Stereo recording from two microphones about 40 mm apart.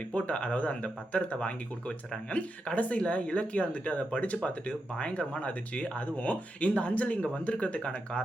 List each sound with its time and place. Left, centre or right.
0.1 s speech: left